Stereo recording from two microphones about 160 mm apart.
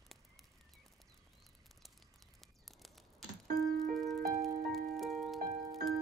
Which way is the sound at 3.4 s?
60° right (ahead or behind).